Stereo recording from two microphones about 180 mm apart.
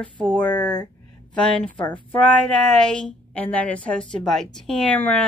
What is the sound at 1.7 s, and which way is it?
Speech, 25° left (ahead or behind).